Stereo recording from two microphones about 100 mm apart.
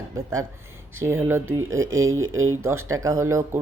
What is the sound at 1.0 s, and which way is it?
A woman's voice, 25° right (ahead or behind).